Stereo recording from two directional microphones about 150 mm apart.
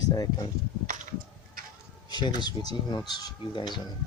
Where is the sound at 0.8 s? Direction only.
60° right (ahead or behind).